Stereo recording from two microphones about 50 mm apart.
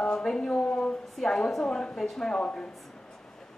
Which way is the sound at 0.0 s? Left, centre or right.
Centre.